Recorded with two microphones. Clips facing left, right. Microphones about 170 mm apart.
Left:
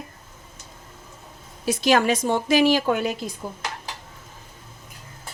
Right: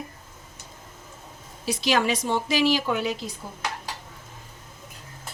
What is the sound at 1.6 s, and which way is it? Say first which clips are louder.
Speech: left 4 dB; 50° left (ahead or behind).